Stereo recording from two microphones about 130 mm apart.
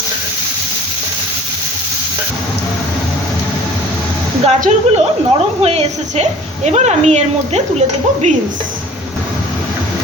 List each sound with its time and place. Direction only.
4.4 s speech: 55° right (ahead or behind)